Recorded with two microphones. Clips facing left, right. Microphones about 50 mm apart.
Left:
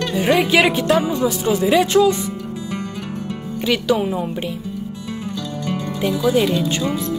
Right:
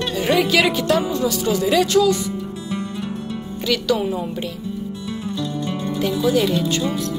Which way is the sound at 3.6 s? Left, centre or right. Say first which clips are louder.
Left 2 dB; left.